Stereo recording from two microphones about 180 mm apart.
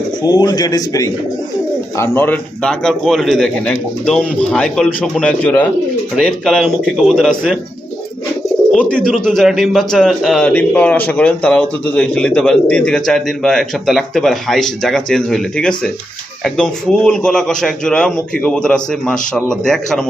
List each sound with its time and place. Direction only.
0.2 s a man's voice: 20° left (ahead or behind); by 7.6 s centre (ahead or behind)
8.7 s a man's voice: 5° left (ahead or behind)